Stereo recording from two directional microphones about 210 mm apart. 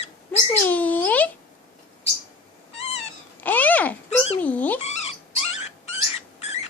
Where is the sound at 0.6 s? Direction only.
10° left (ahead or behind).